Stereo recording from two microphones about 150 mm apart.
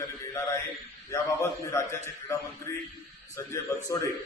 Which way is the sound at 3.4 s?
20° left (ahead or behind).